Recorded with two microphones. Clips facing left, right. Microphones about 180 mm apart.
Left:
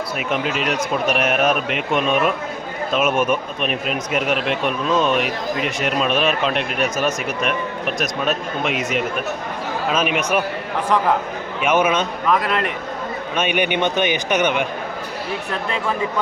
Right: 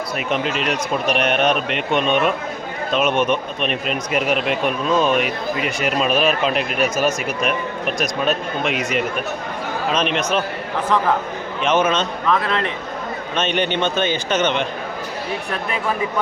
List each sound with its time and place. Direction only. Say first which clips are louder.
0.2 s a man's voice: even; 5° left (ahead or behind)
11.6 s a man's voice: even; 10° left (ahead or behind)